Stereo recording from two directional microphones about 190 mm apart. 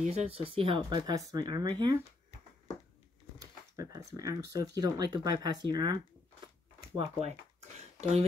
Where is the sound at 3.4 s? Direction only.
15° right (ahead or behind).